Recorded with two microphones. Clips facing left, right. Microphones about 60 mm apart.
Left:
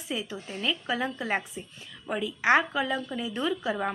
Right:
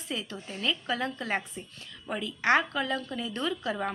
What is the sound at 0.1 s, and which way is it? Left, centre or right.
A woman's voice, centre.